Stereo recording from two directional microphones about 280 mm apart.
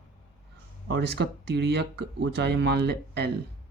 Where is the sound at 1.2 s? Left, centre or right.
Right.